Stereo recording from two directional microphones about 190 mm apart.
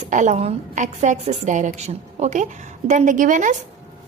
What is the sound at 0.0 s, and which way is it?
A woman's voice, 40° right (ahead or behind).